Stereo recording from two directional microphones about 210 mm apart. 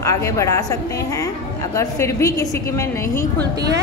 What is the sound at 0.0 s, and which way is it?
A woman's voice, 15° left (ahead or behind).